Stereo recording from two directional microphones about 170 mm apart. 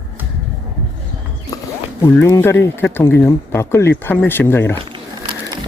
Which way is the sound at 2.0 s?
15° left (ahead or behind).